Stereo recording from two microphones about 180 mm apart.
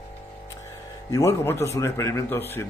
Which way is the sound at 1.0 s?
15° left (ahead or behind).